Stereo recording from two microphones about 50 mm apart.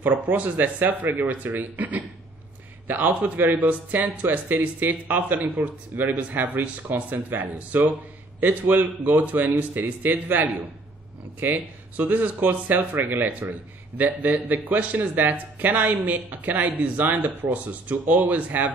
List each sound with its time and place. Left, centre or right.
0.0 s speech: right